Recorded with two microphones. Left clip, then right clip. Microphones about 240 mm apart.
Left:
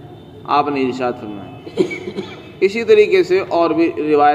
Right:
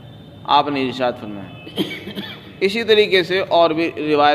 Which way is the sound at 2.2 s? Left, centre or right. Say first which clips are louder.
Left 4 dB; right.